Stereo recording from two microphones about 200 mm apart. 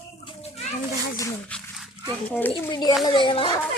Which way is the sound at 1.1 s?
15° left (ahead or behind).